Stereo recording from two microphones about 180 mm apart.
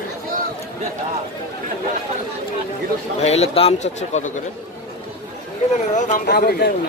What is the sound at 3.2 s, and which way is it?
A man's voice, 35° left (ahead or behind).